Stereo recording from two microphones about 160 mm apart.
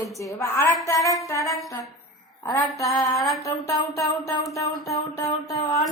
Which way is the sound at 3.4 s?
20° left (ahead or behind).